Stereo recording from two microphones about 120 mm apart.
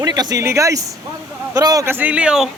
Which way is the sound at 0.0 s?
35° right (ahead or behind).